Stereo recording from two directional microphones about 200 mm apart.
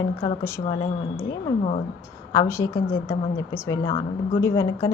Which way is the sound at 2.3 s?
15° left (ahead or behind).